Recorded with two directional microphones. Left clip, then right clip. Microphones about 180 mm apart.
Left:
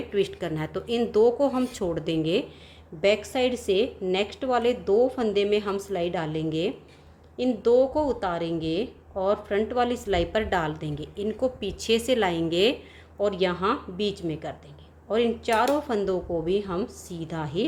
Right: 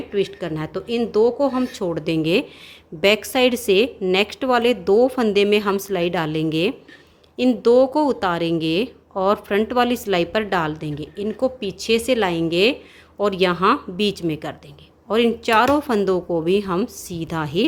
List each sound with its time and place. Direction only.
0.1 s a woman's voice: 20° right (ahead or behind)
13.1 s a woman's voice: 40° right (ahead or behind)